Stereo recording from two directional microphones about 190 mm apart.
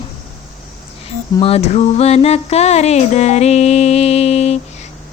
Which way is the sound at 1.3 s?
30° left (ahead or behind).